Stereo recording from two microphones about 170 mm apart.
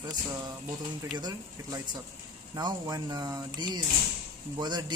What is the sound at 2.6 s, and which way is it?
Speech, 25° right (ahead or behind).